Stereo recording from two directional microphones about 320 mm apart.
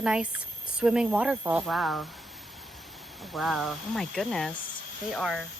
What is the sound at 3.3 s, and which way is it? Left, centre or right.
Speech, centre.